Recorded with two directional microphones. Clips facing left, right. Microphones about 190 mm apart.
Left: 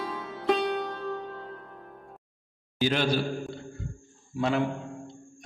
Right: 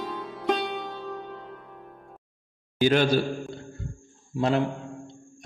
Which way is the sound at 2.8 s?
50° right (ahead or behind).